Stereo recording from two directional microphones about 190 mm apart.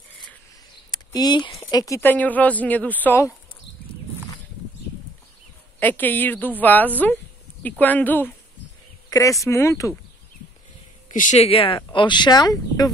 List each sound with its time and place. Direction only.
0.9 s speech: 20° left (ahead or behind)
5.8 s speech: 10° left (ahead or behind)
11.1 s speech: 40° left (ahead or behind); by 12.9 s 20° left (ahead or behind)